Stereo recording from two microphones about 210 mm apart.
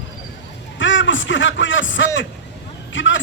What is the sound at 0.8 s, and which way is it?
A man's voice, 65° left (ahead or behind).